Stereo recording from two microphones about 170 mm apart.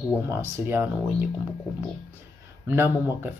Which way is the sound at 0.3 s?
15° right (ahead or behind).